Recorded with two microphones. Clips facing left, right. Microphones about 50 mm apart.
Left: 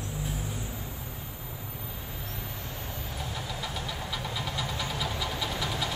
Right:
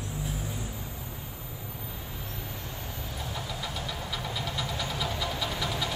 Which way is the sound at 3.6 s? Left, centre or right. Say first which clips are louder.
Even; centre.